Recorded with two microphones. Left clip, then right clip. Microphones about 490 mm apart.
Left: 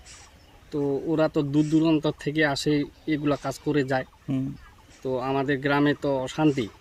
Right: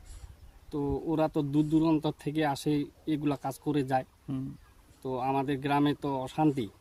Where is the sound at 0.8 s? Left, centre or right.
Right.